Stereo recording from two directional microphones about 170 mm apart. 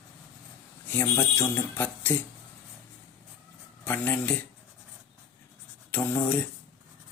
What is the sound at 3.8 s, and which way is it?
Speech, 10° left (ahead or behind).